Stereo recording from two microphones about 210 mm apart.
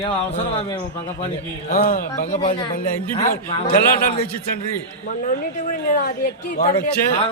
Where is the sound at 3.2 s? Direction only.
40° left (ahead or behind).